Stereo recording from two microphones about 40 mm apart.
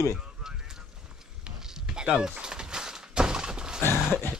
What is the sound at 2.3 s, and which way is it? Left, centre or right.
Thunk, right.